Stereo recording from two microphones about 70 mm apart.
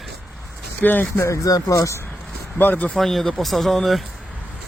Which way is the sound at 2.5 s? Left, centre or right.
Left.